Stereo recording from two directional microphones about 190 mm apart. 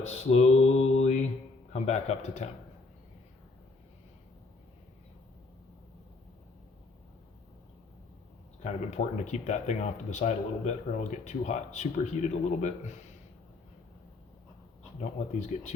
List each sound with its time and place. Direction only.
0.0 s mantra: 35° left (ahead or behind)
1.7 s speech: 35° left (ahead or behind)
8.6 s speech: 40° left (ahead or behind)